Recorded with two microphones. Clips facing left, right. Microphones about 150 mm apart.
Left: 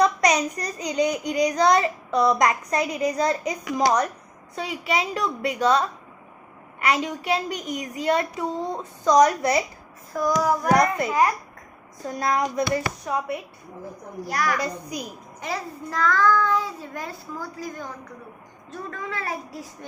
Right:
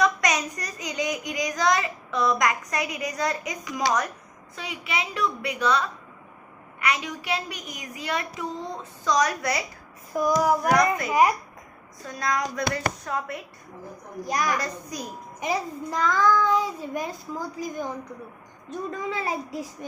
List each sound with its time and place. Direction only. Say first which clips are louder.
0.0 s child singing: left 4 dB; 30° left (ahead or behind)
10.1 s a child's voice: even; 15° right (ahead or behind)
12.0 s child singing: left 4 dB; 30° left (ahead or behind)
13.1 s a woman's voice: left 4 dB; 15° left (ahead or behind)
14.3 s a child's voice: left 1 dB; 15° right (ahead or behind)